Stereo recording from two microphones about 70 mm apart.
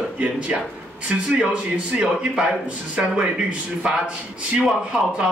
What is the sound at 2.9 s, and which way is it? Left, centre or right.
A man's voice, centre.